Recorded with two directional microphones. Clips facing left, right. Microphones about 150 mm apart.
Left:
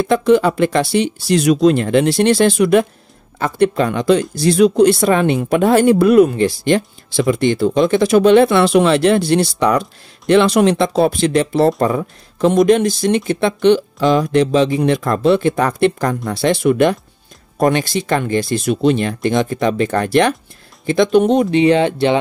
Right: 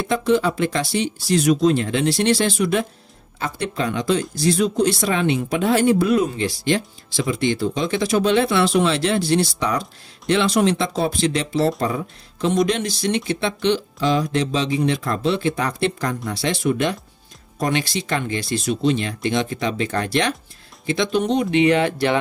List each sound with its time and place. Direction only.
0.0 s speech: 60° left (ahead or behind)
21.5 s speech: 35° left (ahead or behind)